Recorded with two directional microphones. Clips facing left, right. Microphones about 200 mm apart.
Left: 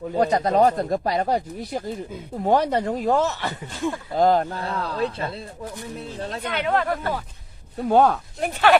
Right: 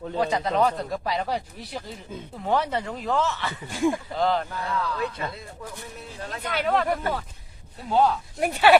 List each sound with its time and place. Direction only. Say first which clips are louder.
0.2 s speech: left 5 dB; 45° left (ahead or behind)
3.7 s speech: right 5 dB; 10° right (ahead or behind)
4.1 s speech: left 6 dB; 45° left (ahead or behind)
6.4 s speech: even; 5° right (ahead or behind)
7.8 s speech: left 4 dB; 55° left (ahead or behind)
8.4 s speech: right 1 dB; 10° right (ahead or behind)